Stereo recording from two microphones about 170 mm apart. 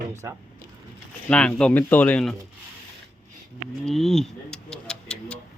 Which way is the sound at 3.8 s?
Centre (ahead or behind).